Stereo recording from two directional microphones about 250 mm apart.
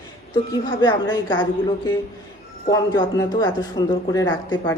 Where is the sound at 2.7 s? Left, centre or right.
Centre.